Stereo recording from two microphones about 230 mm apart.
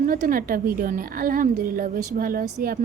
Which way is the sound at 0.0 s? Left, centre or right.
Right.